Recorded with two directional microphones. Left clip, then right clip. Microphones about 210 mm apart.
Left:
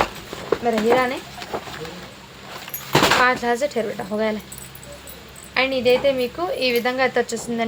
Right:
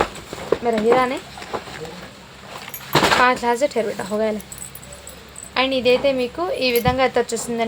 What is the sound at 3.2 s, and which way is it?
Speech, 20° right (ahead or behind).